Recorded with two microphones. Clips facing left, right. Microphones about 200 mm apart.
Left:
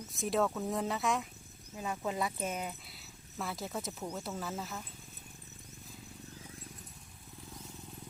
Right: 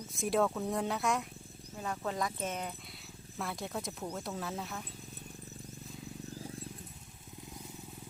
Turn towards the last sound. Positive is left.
turn(degrees=-15)  # may be behind; listen again after turning